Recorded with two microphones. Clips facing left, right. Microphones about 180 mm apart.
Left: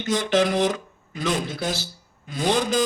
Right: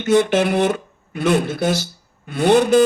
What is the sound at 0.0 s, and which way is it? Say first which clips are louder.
Speech: right 6 dB; 60° right (ahead or behind).